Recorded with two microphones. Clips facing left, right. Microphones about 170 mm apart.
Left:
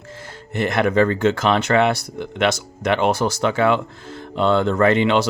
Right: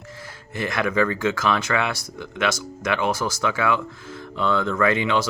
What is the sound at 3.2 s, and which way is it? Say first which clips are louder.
Speech: left 5 dB; 25° left (ahead or behind).